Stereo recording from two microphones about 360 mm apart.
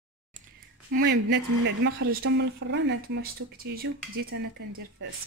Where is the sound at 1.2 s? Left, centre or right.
Right.